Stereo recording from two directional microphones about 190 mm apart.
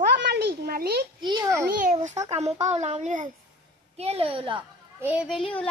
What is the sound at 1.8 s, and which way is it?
A woman's voice, 40° right (ahead or behind).